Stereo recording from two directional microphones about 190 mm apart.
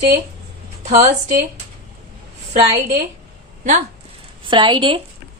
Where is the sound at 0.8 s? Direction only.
40° right (ahead or behind).